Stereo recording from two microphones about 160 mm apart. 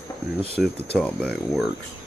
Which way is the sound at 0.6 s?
Centre (ahead or behind).